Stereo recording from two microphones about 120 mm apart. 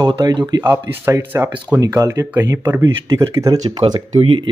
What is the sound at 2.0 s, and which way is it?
Speech, 30° right (ahead or behind).